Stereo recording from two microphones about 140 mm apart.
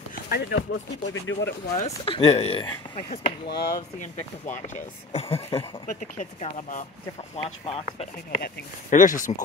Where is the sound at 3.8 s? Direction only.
55° left (ahead or behind).